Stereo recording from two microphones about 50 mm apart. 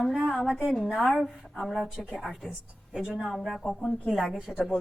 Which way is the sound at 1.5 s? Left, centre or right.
Centre.